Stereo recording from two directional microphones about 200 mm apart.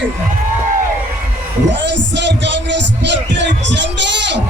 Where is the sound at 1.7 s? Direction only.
60° right (ahead or behind).